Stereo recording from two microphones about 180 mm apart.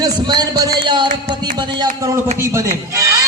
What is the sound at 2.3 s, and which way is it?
Speech, 15° right (ahead or behind).